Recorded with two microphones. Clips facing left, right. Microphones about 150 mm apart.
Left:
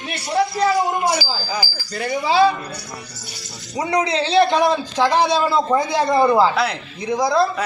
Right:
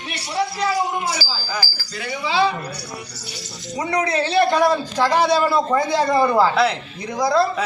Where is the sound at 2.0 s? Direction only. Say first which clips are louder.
Left 4 dB; 40° left (ahead or behind).